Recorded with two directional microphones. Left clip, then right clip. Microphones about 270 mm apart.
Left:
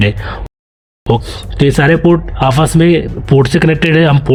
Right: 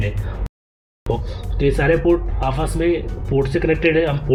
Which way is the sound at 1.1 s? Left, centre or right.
Left.